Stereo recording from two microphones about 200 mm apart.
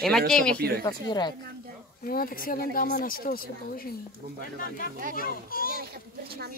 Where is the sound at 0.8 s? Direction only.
20° left (ahead or behind).